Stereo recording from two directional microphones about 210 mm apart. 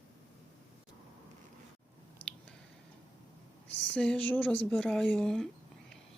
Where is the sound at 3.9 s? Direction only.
5° left (ahead or behind).